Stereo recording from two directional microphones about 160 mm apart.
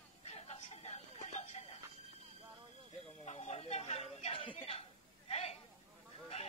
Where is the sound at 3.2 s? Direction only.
45° left (ahead or behind).